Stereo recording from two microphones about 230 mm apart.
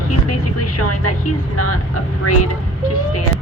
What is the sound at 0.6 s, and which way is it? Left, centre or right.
Speech, left.